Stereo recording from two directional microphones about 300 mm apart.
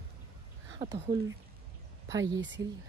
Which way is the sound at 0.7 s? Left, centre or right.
Centre.